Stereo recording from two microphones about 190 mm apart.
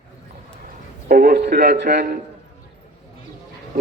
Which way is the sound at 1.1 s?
50° right (ahead or behind).